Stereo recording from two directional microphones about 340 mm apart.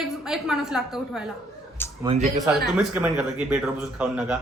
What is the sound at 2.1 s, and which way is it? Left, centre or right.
Speech, centre.